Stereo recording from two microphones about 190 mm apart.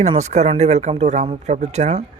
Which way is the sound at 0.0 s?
35° right (ahead or behind).